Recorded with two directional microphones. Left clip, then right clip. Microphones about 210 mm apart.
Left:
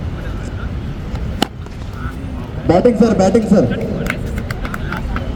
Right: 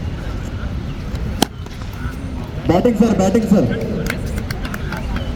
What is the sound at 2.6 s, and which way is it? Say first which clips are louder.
A man's voice: left 3 dB; 50° right (ahead or behind).